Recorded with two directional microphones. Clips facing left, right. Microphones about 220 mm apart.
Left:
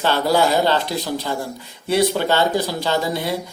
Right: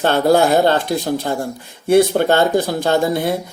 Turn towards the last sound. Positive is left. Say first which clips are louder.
# right 5 dB
turn(degrees=-50)  # may be behind; listen again after turning